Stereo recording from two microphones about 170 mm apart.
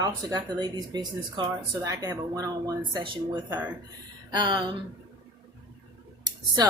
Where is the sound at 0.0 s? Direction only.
20° right (ahead or behind).